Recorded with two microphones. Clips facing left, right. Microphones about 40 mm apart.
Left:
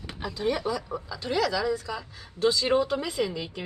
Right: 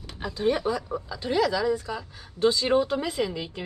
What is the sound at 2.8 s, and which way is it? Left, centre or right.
Speech, centre.